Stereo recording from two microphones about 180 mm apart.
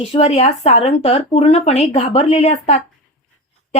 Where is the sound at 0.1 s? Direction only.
35° left (ahead or behind).